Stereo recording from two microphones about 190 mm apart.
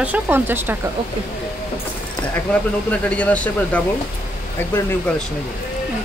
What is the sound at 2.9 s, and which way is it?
Speech, 5° left (ahead or behind).